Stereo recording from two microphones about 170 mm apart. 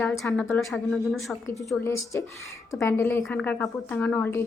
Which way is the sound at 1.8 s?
15° left (ahead or behind).